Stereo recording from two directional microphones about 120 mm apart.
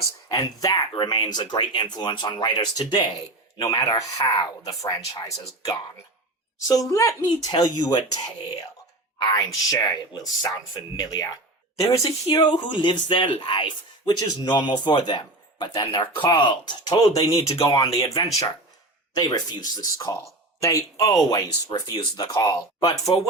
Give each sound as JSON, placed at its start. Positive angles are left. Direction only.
{"t": 0.3, "sound": "a woman's voice", "side_deg": 35}
{"t": 12.3, "sound": "speech", "side_deg": 40}
{"t": 19.1, "sound": "speech", "side_deg": 35}